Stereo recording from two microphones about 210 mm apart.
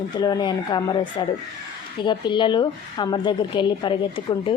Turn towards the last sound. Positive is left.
turn(degrees=25)  # may be behind; listen again after turning